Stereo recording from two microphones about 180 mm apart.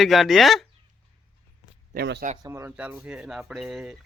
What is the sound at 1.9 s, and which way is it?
Speech, 60° right (ahead or behind).